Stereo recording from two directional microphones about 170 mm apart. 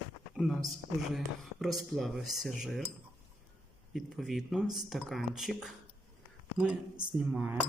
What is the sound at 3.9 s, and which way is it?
Cutlery, centre (ahead or behind).